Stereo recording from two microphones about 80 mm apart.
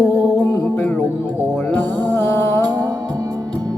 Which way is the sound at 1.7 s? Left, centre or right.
Left.